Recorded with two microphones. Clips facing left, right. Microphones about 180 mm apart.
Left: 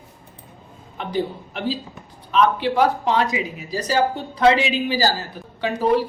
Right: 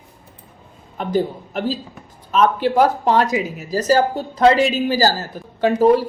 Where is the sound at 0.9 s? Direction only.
45° right (ahead or behind).